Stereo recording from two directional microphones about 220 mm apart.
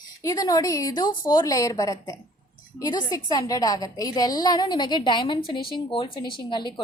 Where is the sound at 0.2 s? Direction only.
15° left (ahead or behind).